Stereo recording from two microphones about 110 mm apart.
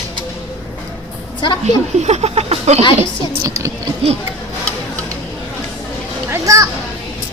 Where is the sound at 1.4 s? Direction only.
45° left (ahead or behind).